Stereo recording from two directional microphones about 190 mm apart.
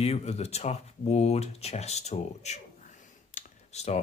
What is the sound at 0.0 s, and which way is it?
Speech, 35° left (ahead or behind).